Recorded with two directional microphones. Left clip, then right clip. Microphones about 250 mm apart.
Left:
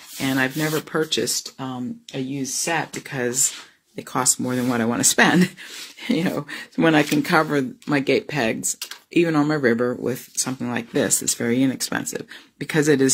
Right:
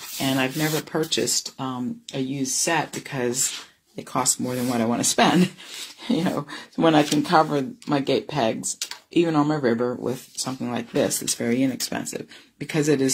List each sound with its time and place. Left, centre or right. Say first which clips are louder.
0.2 s speech: left 2 dB; left